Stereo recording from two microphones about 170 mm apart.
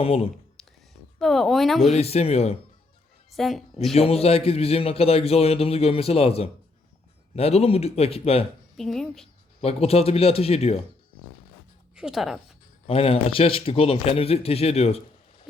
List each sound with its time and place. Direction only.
0.0 s a man's voice: 35° left (ahead or behind)
0.6 s a sound: centre (ahead or behind)
1.2 s speech: centre (ahead or behind)
1.9 s a man's voice: 40° left (ahead or behind)
3.3 s speech: centre (ahead or behind)
3.9 s a man's voice: 35° left (ahead or behind)
8.7 s speech: centre (ahead or behind)
9.6 s a man's voice: 35° left (ahead or behind)
11.9 s speech: 5° right (ahead or behind)
12.9 s a man's voice: 35° left (ahead or behind)